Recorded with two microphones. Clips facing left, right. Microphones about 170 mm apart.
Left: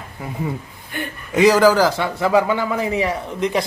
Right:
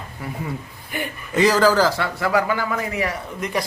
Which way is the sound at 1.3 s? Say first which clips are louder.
Left 3 dB; 15° left (ahead or behind).